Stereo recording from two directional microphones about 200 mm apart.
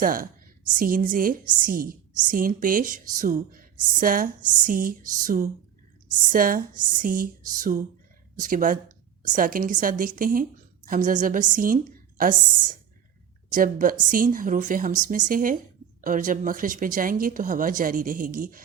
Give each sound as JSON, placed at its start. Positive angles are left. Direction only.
{"t": 0.0, "sound": "a woman's voice", "side_deg": -45}